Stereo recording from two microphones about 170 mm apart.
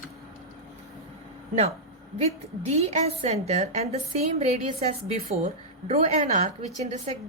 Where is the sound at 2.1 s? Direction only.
40° right (ahead or behind).